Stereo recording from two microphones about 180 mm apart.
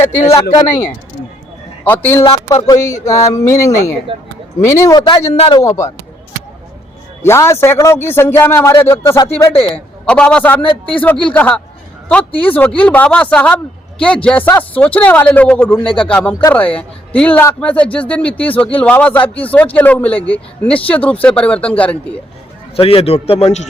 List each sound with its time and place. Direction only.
0.0 s a man's voice: 15° left (ahead or behind)
1.8 s a man's voice: 10° left (ahead or behind)
2.2 s a man's voice: 30° left (ahead or behind)
2.6 s a man's voice: 20° left (ahead or behind)
4.1 s speech: 30° right (ahead or behind)
4.6 s speech: 15° left (ahead or behind)
7.2 s a man's voice: 15° left (ahead or behind)
9.5 s a man's voice: 30° left (ahead or behind)
10.1 s a man's voice: 5° left (ahead or behind)
22.7 s a man's voice: 30° left (ahead or behind)